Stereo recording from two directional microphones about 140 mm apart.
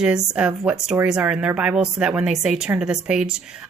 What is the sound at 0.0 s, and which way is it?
A woman's voice, 5° right (ahead or behind).